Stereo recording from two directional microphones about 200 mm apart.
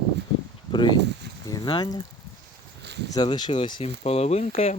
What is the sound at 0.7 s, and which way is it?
Speech, 20° left (ahead or behind).